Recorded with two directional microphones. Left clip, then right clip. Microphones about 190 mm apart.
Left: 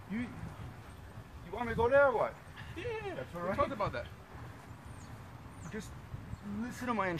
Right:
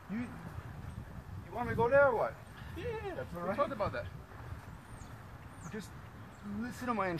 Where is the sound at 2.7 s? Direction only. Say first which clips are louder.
Even; 5° right (ahead or behind).